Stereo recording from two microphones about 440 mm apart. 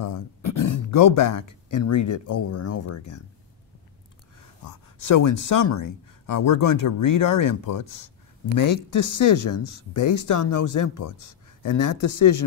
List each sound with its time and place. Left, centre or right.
0.0 s speech: left
4.6 s a man's voice: left